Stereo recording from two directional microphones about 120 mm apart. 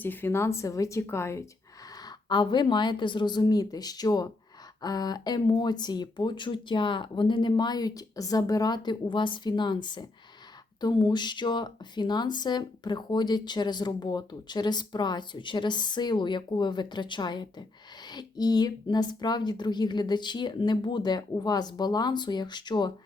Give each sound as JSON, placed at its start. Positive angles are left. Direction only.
{"t": 0.0, "sound": "speech", "side_deg": 15}
{"t": 2.0, "sound": "speech", "side_deg": 35}